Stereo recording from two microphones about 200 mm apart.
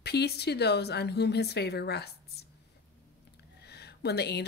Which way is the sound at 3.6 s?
55° left (ahead or behind).